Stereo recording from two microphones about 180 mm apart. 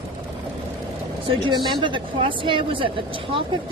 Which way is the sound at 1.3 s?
25° right (ahead or behind).